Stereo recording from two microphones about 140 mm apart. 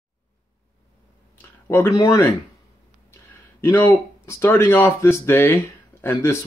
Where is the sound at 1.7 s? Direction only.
20° left (ahead or behind).